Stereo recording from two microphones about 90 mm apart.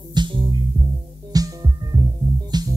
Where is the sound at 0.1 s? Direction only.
60° right (ahead or behind).